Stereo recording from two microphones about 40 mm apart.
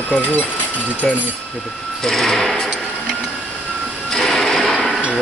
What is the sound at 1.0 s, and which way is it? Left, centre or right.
Speech, centre.